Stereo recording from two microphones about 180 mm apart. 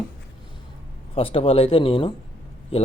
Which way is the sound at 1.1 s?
30° left (ahead or behind).